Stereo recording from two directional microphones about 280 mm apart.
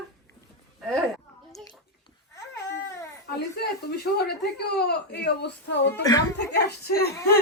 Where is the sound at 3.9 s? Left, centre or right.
Left.